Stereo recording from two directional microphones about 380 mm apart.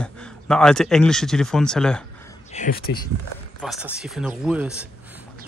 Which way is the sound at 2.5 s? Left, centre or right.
Left.